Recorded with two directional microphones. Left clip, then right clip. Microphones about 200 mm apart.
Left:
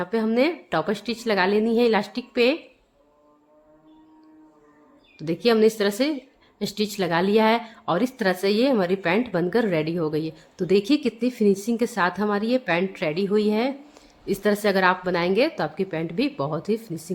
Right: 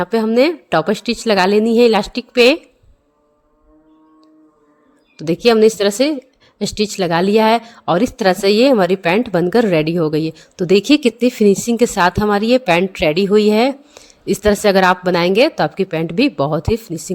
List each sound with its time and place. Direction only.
0.0 s a woman's voice: 35° right (ahead or behind)
5.1 s a woman's voice: 35° right (ahead or behind)